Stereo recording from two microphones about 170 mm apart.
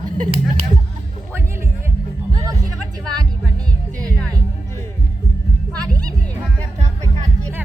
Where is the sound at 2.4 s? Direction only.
20° right (ahead or behind).